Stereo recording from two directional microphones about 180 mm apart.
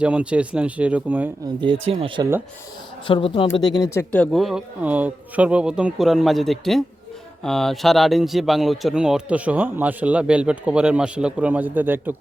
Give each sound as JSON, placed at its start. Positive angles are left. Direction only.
{"t": 0.0, "sound": "speech", "side_deg": -5}
{"t": 1.6, "sound": "speech", "side_deg": -30}
{"t": 3.1, "sound": "speech", "side_deg": 30}
{"t": 3.8, "sound": "speech", "side_deg": 15}